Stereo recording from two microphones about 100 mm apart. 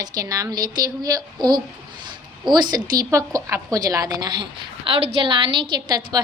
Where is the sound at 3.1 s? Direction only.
30° right (ahead or behind).